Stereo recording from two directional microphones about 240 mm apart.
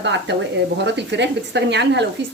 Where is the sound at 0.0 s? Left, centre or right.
Right.